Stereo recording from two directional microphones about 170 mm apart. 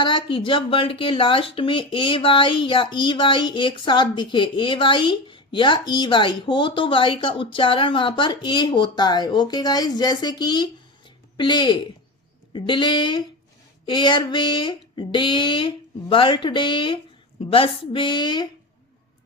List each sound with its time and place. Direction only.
0.0 s speech: 30° left (ahead or behind)